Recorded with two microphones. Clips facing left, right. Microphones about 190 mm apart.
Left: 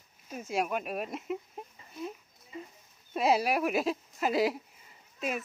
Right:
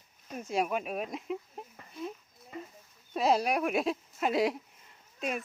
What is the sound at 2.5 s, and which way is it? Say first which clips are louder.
Speech: right 1 dB; 55° right (ahead or behind).